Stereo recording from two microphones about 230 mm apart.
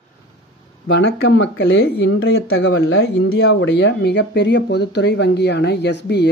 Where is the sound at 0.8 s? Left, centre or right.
Left.